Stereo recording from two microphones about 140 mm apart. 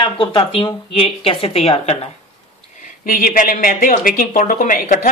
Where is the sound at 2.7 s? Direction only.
70° left (ahead or behind).